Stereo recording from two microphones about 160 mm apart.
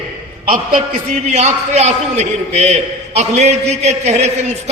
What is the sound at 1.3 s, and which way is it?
A man's voice, 45° right (ahead or behind).